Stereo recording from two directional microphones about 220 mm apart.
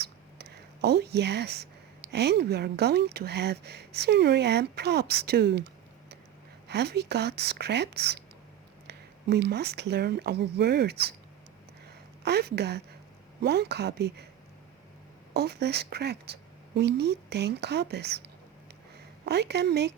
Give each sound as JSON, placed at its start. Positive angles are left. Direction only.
{"t": 0.0, "sound": "whispering", "side_deg": -50}
{"t": 2.1, "sound": "a woman's voice", "side_deg": -50}
{"t": 6.7, "sound": "a woman's voice", "side_deg": -50}
{"t": 12.2, "sound": "a woman's voice", "side_deg": -50}
{"t": 15.3, "sound": "a woman's voice", "side_deg": -45}
{"t": 19.2, "sound": "a woman's voice", "side_deg": -50}